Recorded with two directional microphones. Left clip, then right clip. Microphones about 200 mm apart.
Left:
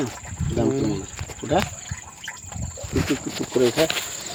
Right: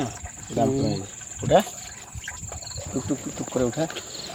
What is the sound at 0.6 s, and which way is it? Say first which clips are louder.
Speech: even; 45° right (ahead or behind).